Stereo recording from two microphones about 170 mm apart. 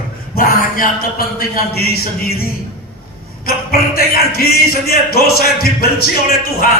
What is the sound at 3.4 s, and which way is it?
Speech, 65° left (ahead or behind).